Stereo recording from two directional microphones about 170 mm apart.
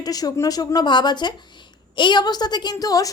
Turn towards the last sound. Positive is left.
turn(degrees=20)  # may be behind; listen again after turning